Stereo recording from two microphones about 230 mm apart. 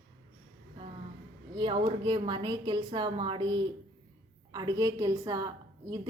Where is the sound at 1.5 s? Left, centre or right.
Right.